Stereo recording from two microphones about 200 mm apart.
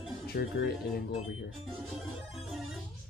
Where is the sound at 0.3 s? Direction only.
50° left (ahead or behind).